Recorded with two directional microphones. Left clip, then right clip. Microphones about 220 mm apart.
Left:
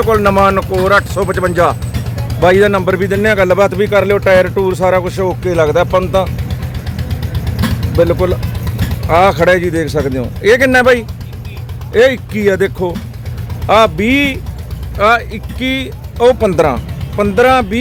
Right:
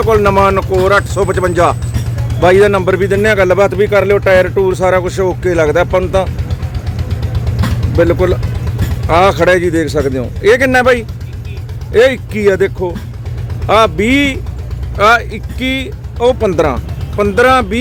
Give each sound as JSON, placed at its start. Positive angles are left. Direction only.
{"t": 0.0, "sound": "a man's voice", "side_deg": 0}
{"t": 6.3, "sound": "vehicle", "side_deg": 50}
{"t": 9.0, "sound": "a man's voice", "side_deg": -5}
{"t": 16.1, "sound": "speech", "side_deg": 5}